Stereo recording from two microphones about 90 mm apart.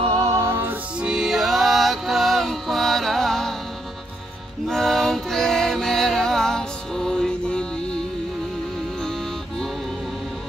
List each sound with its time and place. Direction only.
0.2 s music: 35° right (ahead or behind)
1.0 s music: 5° right (ahead or behind)
4.6 s music: 5° left (ahead or behind)